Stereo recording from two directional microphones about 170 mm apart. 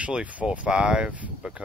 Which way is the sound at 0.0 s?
5° right (ahead or behind).